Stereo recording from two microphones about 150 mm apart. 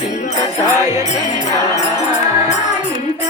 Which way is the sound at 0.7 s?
20° right (ahead or behind).